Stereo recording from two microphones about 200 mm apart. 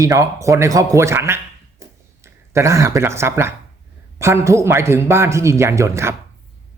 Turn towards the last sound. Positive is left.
turn(degrees=-15)  # may be behind; listen again after turning